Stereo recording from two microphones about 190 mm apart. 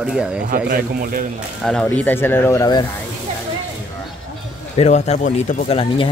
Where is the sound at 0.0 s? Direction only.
5° right (ahead or behind).